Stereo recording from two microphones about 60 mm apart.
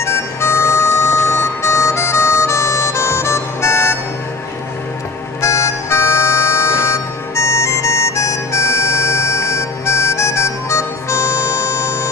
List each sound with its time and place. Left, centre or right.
0.0 s music: left
5.4 s music: left